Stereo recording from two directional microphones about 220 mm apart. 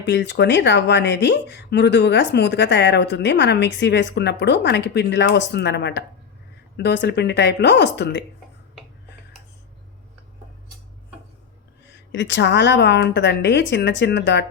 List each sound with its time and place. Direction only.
0.0 s speech: 55° left (ahead or behind)
12.1 s speech: 55° left (ahead or behind)